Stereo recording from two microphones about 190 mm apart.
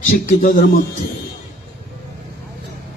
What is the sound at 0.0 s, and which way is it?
Speech, 40° left (ahead or behind).